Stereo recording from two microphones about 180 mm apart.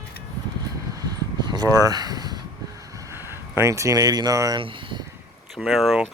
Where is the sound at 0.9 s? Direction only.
20° right (ahead or behind).